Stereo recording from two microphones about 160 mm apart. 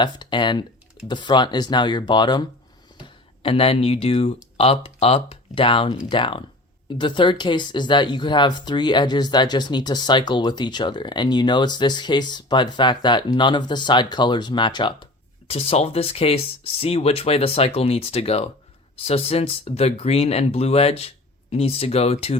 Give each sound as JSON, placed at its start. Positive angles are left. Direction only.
{"t": 0.0, "sound": "speech", "side_deg": 30}